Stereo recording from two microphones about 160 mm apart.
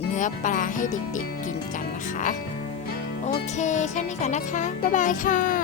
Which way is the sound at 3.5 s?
50° left (ahead or behind).